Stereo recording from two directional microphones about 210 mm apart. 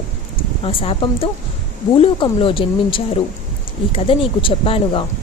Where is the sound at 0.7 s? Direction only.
25° left (ahead or behind).